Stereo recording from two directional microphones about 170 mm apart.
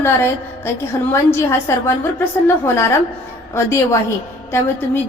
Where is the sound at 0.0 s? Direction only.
15° left (ahead or behind).